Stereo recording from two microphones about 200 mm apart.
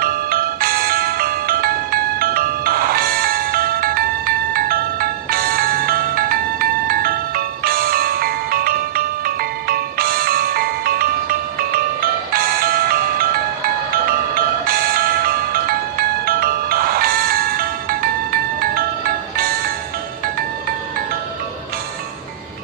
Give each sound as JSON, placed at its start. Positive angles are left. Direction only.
{"t": 0.0, "sound": "music", "side_deg": -50}